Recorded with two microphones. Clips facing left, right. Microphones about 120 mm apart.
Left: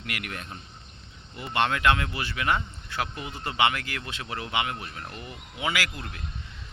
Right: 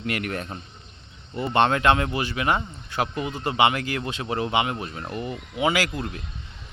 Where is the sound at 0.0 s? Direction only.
35° right (ahead or behind).